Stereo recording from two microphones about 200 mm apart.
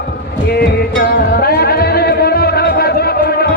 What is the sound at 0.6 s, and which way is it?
Music, 55° left (ahead or behind).